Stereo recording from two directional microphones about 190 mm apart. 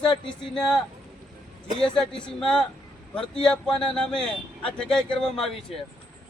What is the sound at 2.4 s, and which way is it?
A man's voice, 5° left (ahead or behind).